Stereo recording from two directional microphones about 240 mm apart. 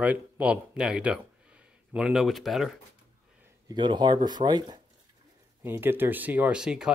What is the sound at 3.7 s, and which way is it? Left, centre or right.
Speech, centre.